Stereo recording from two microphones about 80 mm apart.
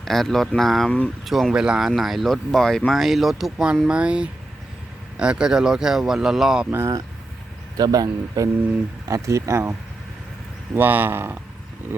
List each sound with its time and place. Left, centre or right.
0.0 s speech: centre
0.9 s speech: centre
1.2 s speech: centre
3.8 s speech: centre
6.7 s speech: right
7.8 s speech: right
10.8 s speech: right